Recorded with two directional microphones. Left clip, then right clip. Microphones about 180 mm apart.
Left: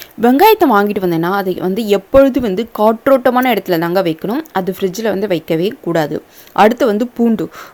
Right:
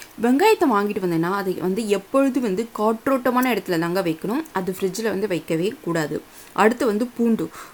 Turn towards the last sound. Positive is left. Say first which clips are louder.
# left 7 dB
turn(degrees=25)  # may be behind; listen again after turning